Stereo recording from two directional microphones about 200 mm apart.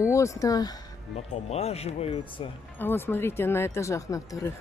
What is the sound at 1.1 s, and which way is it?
Speech, 30° left (ahead or behind).